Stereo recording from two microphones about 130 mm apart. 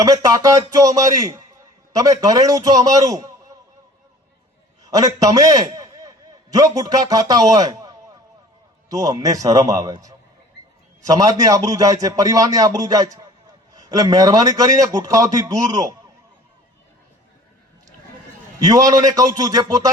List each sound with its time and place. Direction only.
0.0 s a man's voice: 25° right (ahead or behind)
4.9 s a man's voice: 30° right (ahead or behind)
18.6 s a man's voice: 25° right (ahead or behind)